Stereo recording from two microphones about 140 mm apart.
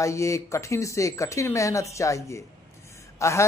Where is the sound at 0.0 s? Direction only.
20° left (ahead or behind).